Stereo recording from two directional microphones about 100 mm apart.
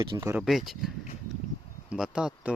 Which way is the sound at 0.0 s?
45° right (ahead or behind).